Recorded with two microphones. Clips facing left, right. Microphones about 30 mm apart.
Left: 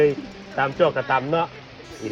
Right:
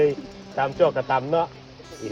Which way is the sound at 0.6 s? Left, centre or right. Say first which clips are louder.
Left 1 dB; left.